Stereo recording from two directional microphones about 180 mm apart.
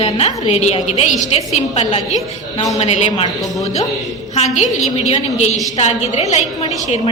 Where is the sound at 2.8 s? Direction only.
40° left (ahead or behind).